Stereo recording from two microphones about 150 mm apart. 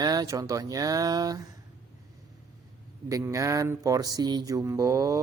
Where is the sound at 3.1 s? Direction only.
20° right (ahead or behind).